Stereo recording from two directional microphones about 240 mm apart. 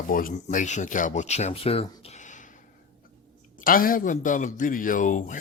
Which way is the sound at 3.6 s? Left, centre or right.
Left.